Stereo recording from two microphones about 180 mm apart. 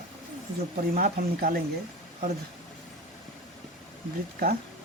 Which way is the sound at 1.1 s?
50° right (ahead or behind).